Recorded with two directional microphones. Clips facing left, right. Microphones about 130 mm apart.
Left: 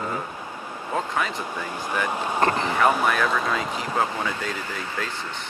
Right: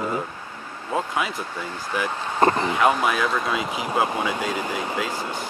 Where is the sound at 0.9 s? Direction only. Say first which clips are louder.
Right 1 dB; 10° right (ahead or behind).